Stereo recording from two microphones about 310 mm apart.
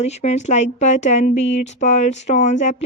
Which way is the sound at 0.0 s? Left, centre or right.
Left.